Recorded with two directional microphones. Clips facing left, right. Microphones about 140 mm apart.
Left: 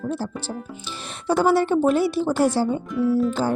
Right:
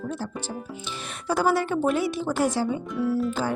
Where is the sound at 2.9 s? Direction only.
5° right (ahead or behind).